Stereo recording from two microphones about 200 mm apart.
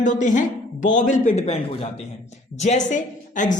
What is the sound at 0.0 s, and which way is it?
A woman's voice, 40° left (ahead or behind).